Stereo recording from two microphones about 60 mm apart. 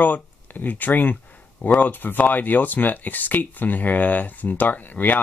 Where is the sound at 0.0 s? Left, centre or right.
Left.